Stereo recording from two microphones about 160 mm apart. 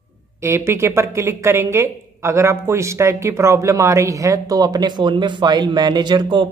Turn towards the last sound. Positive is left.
turn(degrees=-30)  # may be behind; listen again after turning